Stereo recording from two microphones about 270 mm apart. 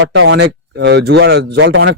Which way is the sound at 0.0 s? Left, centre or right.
Right.